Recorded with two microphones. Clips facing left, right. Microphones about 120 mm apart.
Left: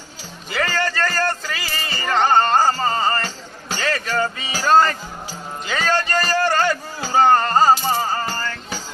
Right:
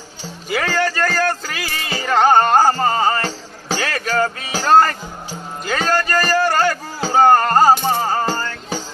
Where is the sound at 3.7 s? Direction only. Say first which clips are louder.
Right 2 dB; 70° right (ahead or behind).